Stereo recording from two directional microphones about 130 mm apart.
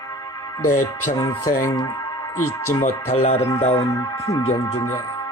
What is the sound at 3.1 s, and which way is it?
Speech, 55° left (ahead or behind).